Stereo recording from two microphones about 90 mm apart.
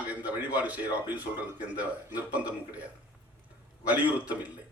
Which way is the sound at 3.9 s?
15° right (ahead or behind).